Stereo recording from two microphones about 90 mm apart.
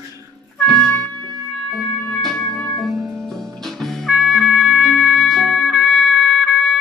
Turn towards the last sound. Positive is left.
turn(degrees=5)  # may be behind; listen again after turning